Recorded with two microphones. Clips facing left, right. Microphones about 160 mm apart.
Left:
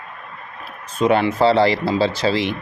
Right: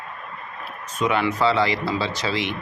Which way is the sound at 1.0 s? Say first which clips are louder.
Left 5 dB; 35° left (ahead or behind).